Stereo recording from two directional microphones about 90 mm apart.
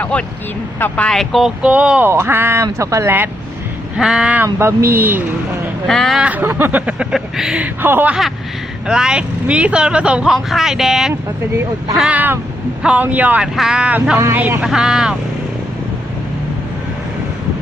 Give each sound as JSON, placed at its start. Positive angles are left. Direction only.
{"t": 0.0, "sound": "speech", "side_deg": 15}
{"t": 1.1, "sound": "speech", "side_deg": 0}
{"t": 1.6, "sound": "speech", "side_deg": -10}
{"t": 2.0, "sound": "speech", "side_deg": -25}
{"t": 3.9, "sound": "speech", "side_deg": -5}
{"t": 4.4, "sound": "speech", "side_deg": -30}
{"t": 5.9, "sound": "speech", "side_deg": 5}
{"t": 6.1, "sound": "speech", "side_deg": -15}
{"t": 7.1, "sound": "speech", "side_deg": -5}
{"t": 7.8, "sound": "speech", "side_deg": -25}
{"t": 8.9, "sound": "speech", "side_deg": -10}
{"t": 11.1, "sound": "speech", "side_deg": -30}
{"t": 14.6, "sound": "speech", "side_deg": -5}